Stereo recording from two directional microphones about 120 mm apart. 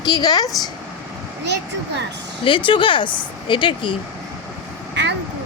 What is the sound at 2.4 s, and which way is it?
Speech, 45° left (ahead or behind).